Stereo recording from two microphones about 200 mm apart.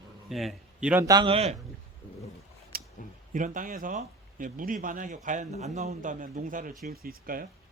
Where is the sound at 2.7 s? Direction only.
50° right (ahead or behind).